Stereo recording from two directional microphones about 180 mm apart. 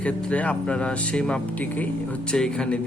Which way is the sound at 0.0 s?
5° left (ahead or behind).